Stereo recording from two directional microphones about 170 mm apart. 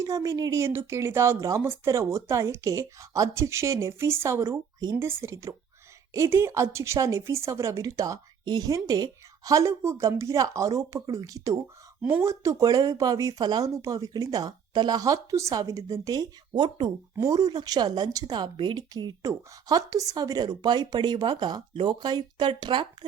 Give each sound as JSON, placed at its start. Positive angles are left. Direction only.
{"t": 0.0, "sound": "a woman's voice", "side_deg": -20}